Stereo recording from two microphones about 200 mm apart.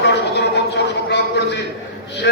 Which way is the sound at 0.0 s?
60° left (ahead or behind).